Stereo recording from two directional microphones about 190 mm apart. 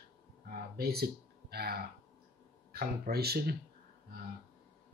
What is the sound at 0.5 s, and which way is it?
Speech, 55° right (ahead or behind).